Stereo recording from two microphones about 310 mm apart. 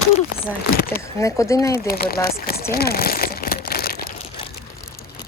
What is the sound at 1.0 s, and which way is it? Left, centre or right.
Speech, centre.